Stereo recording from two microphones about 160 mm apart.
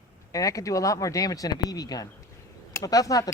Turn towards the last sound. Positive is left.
turn(degrees=20)  # may be behind; listen again after turning